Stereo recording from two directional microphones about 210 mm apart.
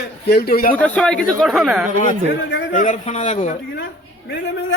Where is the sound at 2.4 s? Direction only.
60° left (ahead or behind).